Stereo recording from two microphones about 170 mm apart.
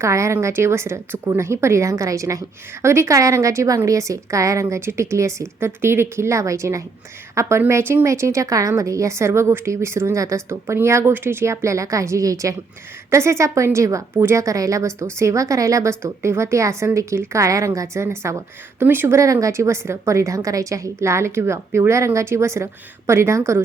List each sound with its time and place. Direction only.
0.0 s a woman's voice: 15° right (ahead or behind)